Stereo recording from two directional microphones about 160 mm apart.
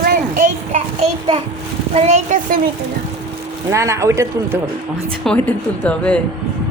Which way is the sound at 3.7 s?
20° right (ahead or behind).